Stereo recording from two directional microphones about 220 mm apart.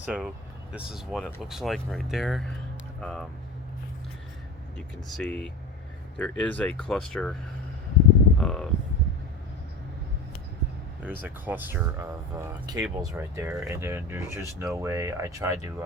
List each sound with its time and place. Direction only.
0.0 s speech: 5° right (ahead or behind)
5.1 s speech: 5° left (ahead or behind)
8.4 s speech: 5° left (ahead or behind)
11.0 s speech: 10° right (ahead or behind)